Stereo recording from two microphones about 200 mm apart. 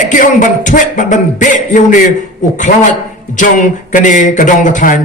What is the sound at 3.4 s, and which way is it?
A man's voice, 40° left (ahead or behind).